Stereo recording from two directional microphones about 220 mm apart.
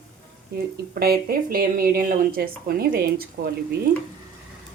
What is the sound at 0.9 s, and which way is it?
Speech, 45° right (ahead or behind).